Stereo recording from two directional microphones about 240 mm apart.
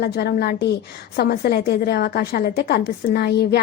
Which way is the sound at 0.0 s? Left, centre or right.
Left.